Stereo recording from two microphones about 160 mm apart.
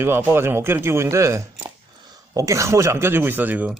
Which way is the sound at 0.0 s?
15° right (ahead or behind).